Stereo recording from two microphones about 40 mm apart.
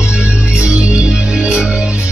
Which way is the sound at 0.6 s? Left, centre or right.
Right.